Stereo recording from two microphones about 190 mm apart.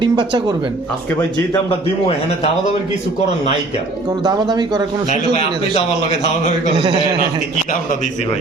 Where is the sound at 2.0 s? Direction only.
35° left (ahead or behind).